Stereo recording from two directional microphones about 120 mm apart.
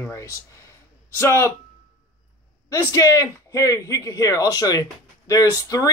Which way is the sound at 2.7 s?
30° left (ahead or behind).